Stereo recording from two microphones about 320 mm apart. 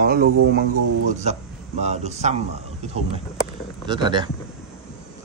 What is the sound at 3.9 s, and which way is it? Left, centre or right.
Speech, centre.